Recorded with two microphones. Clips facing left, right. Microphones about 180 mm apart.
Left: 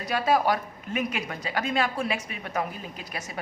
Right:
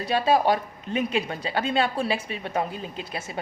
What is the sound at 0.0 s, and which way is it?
A woman's voice, 25° right (ahead or behind).